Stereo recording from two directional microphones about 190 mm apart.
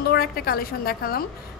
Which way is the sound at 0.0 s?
55° left (ahead or behind).